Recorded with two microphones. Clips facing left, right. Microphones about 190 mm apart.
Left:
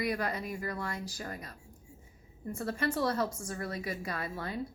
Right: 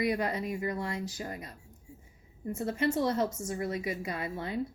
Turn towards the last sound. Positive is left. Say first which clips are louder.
# right 3 dB
turn(degrees=-20)  # may be behind; listen again after turning